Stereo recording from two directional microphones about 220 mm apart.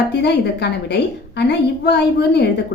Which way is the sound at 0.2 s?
50° left (ahead or behind).